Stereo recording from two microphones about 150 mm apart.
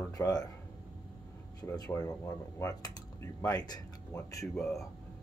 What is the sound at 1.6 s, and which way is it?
Speech, 25° left (ahead or behind).